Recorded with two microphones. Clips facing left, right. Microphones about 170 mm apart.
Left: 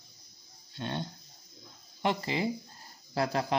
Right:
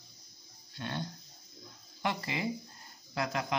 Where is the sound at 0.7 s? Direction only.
25° left (ahead or behind).